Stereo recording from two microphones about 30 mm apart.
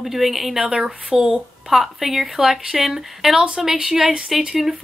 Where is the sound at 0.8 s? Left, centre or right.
Centre.